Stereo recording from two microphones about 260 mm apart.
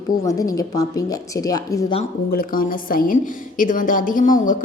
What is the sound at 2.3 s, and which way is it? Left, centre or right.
A woman's voice, left.